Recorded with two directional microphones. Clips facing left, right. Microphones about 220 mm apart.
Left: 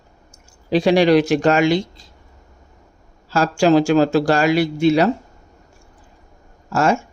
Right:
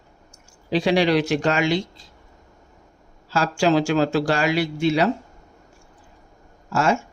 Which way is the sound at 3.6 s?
45° left (ahead or behind).